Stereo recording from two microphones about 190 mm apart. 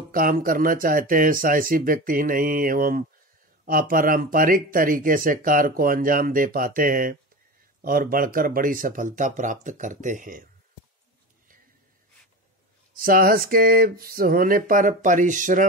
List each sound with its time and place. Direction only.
0.1 s speech: 50° right (ahead or behind)
12.9 s speech: 50° right (ahead or behind)